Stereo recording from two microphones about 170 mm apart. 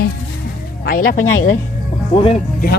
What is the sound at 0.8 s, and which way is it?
Speech, 65° left (ahead or behind).